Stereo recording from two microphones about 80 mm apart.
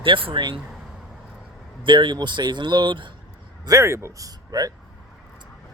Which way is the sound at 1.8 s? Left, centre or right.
Right.